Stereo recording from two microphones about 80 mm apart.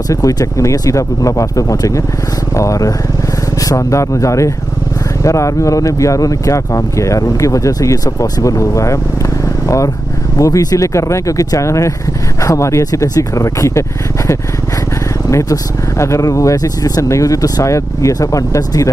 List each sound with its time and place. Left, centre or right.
0.1 s speech: left